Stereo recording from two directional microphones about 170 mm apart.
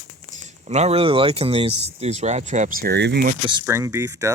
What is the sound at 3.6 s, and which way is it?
Speech, 15° right (ahead or behind).